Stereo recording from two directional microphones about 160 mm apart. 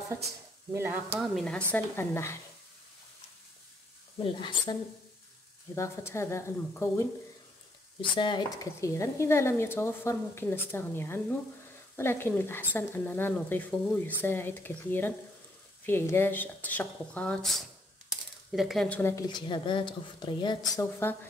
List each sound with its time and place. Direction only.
0.7 s speech: 15° right (ahead or behind)
1.2 s speech: 5° left (ahead or behind)
1.7 s speech: 15° left (ahead or behind)
4.2 s speech: 30° left (ahead or behind)
5.8 s speech: 15° left (ahead or behind)
8.0 s speech: 30° left (ahead or behind); by 19.1 s 10° left (ahead or behind)
19.1 s a woman's voice: 30° left (ahead or behind)